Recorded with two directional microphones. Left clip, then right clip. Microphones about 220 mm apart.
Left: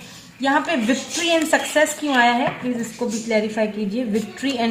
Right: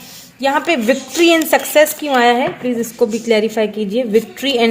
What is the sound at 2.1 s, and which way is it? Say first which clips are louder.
A woman's voice: right 4 dB; 45° right (ahead or behind).